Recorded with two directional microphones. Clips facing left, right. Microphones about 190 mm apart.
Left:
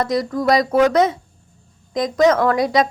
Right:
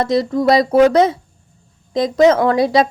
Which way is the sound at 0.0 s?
25° right (ahead or behind).